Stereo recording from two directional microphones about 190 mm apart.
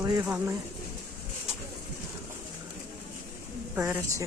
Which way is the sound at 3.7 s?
10° right (ahead or behind).